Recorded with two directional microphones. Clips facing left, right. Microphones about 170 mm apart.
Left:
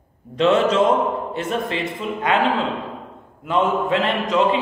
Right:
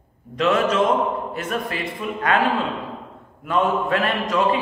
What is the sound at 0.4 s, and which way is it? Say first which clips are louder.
A man's voice: left 3 dB; 25° left (ahead or behind).